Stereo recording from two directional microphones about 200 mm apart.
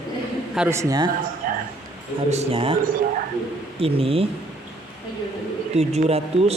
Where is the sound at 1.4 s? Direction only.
45° right (ahead or behind).